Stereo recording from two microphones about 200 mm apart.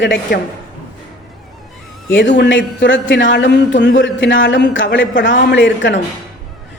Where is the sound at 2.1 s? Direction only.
60° left (ahead or behind).